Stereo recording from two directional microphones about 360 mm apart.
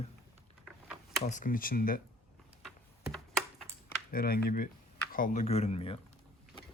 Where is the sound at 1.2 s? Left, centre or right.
Left.